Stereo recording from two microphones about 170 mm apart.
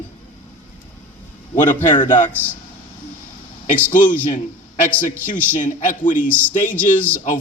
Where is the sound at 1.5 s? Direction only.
50° left (ahead or behind).